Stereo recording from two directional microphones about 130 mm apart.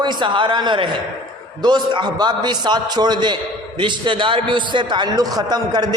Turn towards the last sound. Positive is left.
turn(degrees=-35)  # may be behind; listen again after turning